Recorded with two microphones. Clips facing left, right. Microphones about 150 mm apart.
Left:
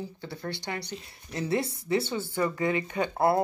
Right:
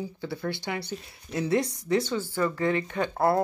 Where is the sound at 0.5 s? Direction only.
20° left (ahead or behind).